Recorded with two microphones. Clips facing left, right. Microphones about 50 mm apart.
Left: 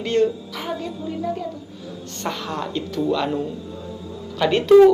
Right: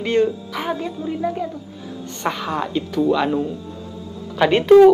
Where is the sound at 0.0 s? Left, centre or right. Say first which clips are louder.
Right 1 dB; centre.